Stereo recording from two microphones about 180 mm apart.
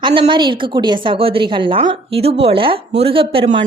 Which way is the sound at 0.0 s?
25° right (ahead or behind).